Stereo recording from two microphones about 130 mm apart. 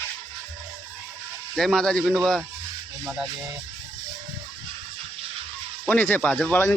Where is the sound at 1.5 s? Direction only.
5° left (ahead or behind).